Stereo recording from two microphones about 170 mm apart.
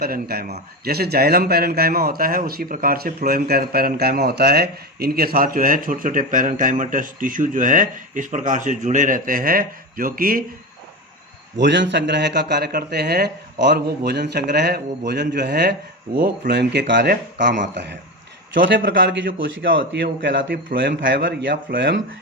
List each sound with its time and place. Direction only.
0.0 s a man's voice: 65° right (ahead or behind)
11.5 s a man's voice: 90° right
16.1 s a man's voice: 60° right (ahead or behind); by 18.8 s 90° right
18.8 s a man's voice: 80° right